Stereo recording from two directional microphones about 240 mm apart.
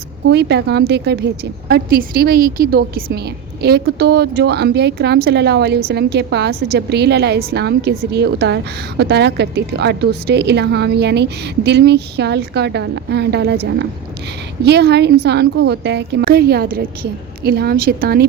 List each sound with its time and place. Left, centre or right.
0.3 s a woman's voice: right